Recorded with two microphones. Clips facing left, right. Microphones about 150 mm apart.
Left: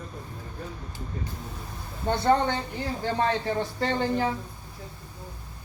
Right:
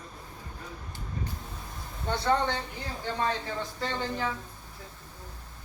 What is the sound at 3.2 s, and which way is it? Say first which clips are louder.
Speech: left 5 dB; 65° left (ahead or behind).